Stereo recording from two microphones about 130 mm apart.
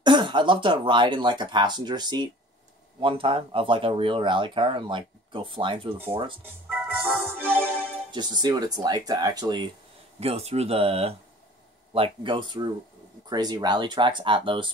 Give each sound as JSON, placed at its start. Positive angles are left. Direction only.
{"t": 0.0, "sound": "speech", "side_deg": -35}
{"t": 6.7, "sound": "organ", "side_deg": -15}
{"t": 7.2, "sound": "music", "side_deg": -15}
{"t": 8.1, "sound": "speech", "side_deg": -35}
{"t": 10.2, "sound": "speech", "side_deg": -50}